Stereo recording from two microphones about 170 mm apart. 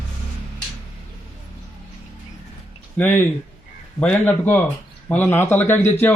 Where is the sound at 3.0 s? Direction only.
10° left (ahead or behind).